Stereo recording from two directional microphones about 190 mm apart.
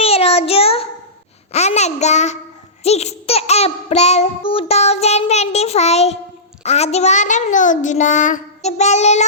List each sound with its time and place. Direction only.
0.0 s child singing: 30° left (ahead or behind)
1.5 s babbling: 35° left (ahead or behind)